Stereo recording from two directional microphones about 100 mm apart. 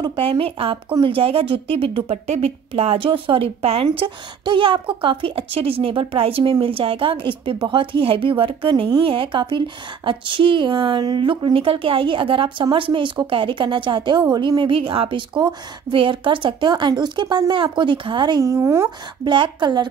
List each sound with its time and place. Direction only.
0.1 s a woman's voice: 65° right (ahead or behind)
3.8 s a woman's voice: 55° right (ahead or behind)
18.4 s speech: 30° right (ahead or behind)
19.2 s a woman's voice: 50° right (ahead or behind)